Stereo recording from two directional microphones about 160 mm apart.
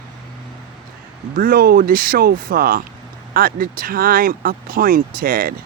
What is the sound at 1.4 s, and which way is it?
Speech, 65° right (ahead or behind).